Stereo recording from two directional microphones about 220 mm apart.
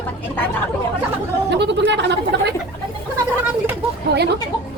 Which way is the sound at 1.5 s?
50° right (ahead or behind).